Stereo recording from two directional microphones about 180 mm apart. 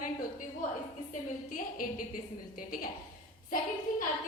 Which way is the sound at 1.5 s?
50° left (ahead or behind).